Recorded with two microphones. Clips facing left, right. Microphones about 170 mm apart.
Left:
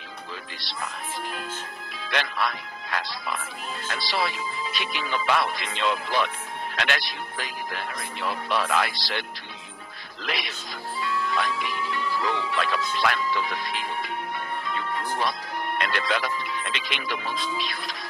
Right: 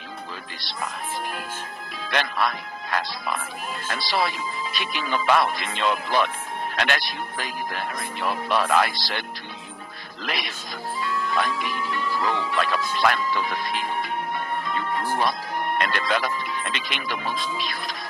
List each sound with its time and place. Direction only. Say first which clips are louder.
2.0 s speech: right 3 dB; 45° right (ahead or behind)
10.2 s speech: right 1 dB; 45° right (ahead or behind)